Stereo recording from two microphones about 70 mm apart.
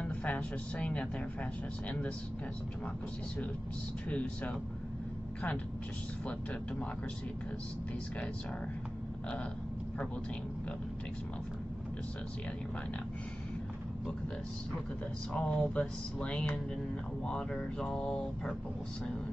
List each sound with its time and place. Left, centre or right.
0.0 s speech: left
4.1 s speech: centre
15.3 s speech: centre